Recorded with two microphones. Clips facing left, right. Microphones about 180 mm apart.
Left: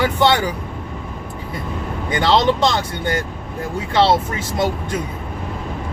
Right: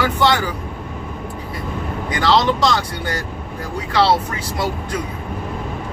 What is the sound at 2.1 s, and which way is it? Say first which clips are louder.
Speech: left 1 dB; 25° left (ahead or behind).